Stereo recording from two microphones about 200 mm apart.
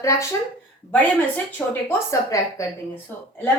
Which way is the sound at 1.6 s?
5° left (ahead or behind).